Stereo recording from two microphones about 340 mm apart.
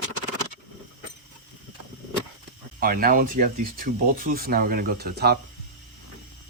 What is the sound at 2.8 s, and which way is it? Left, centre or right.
Speech, right.